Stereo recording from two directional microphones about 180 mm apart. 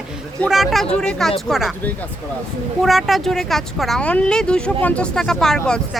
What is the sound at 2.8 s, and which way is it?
A woman's voice, centre (ahead or behind).